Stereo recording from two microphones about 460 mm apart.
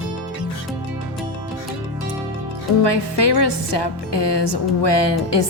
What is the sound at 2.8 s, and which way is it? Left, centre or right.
Music, left.